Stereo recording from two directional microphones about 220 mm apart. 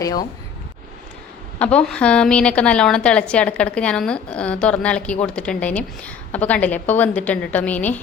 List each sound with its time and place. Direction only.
1.5 s a woman's voice: 5° left (ahead or behind)